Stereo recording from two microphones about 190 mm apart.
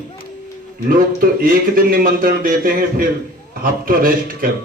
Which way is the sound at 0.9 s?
45° right (ahead or behind).